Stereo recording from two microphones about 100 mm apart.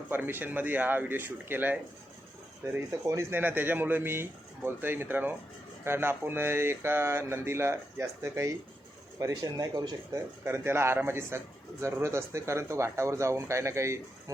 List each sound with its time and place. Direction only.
0.1 s speech: 20° right (ahead or behind)
2.9 s speech: 30° right (ahead or behind)